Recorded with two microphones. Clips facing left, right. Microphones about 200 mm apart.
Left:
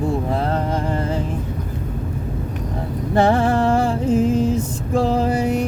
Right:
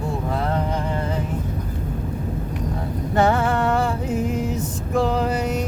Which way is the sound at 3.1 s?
30° left (ahead or behind).